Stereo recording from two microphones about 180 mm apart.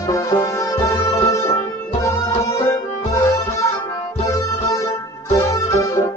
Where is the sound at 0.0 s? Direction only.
20° left (ahead or behind).